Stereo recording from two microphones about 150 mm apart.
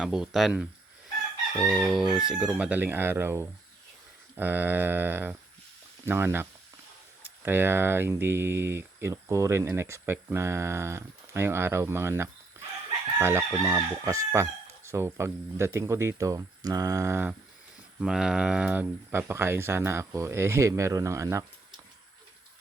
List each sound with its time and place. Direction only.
0.0 s speech: 5° right (ahead or behind)
18.0 s speech: 5° right (ahead or behind); by 21.4 s 20° right (ahead or behind)